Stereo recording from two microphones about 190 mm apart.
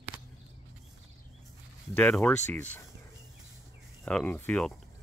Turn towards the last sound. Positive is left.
turn(degrees=5)  # may be behind; listen again after turning